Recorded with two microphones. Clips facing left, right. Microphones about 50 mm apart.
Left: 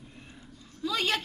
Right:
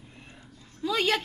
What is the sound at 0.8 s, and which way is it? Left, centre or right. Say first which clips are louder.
Speech: right 3 dB; right.